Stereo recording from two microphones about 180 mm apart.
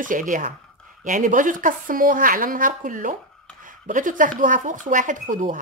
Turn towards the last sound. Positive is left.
turn(degrees=-45)  # may be behind; listen again after turning